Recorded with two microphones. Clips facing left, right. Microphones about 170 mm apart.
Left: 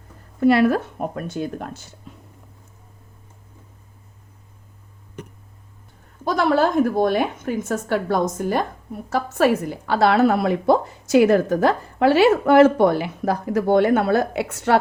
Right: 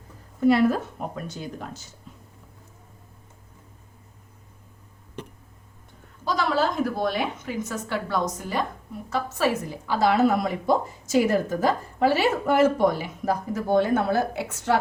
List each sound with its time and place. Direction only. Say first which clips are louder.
0.3 s speech: left 3 dB; 70° left (ahead or behind)
6.2 s speech: left 6 dB; 55° left (ahead or behind)